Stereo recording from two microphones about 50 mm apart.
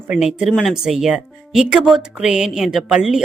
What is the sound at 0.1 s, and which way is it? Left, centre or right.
A woman's voice, centre.